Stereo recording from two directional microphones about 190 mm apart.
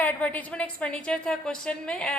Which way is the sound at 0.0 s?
10° left (ahead or behind).